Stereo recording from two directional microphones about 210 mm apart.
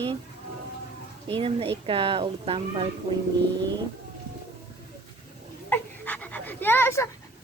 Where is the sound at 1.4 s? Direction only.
25° right (ahead or behind).